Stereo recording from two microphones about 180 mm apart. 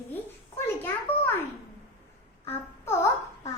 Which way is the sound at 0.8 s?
10° left (ahead or behind).